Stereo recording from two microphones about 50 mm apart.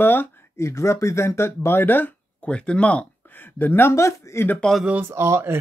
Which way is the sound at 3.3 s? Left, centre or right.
Left.